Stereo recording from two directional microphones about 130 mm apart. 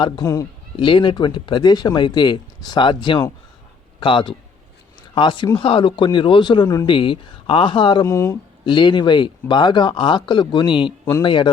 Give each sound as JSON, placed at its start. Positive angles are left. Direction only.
{"t": 0.0, "sound": "speech", "side_deg": 25}
{"t": 0.8, "sound": "speech", "side_deg": 40}
{"t": 8.0, "sound": "speech", "side_deg": 25}
{"t": 8.6, "sound": "speech", "side_deg": 35}